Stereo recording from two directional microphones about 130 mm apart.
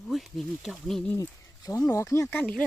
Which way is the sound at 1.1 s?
25° left (ahead or behind).